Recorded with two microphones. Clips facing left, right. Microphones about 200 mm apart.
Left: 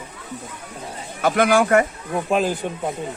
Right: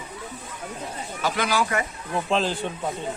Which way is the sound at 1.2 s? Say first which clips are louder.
Left 8 dB; 55° left (ahead or behind).